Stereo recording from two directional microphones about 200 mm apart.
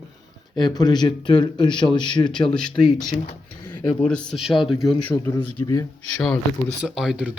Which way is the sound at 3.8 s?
10° left (ahead or behind).